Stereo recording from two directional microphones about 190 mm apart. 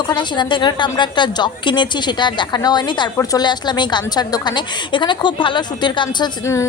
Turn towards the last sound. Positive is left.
turn(degrees=15)  # may be behind; listen again after turning